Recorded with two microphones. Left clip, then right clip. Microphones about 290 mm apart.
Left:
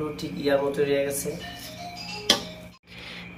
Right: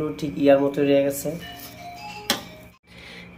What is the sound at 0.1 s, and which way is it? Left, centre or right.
Speech, right.